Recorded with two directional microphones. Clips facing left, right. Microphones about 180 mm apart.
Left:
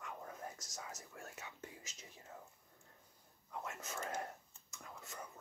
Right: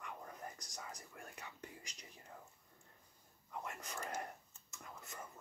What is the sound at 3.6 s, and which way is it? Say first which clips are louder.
Speech: left 1 dB; centre (ahead or behind).